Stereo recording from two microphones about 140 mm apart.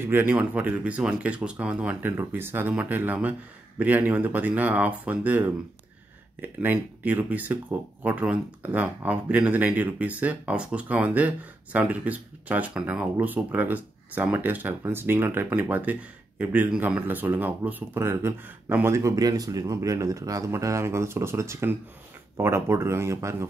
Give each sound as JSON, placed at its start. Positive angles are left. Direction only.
{"t": 0.0, "sound": "speech", "side_deg": -15}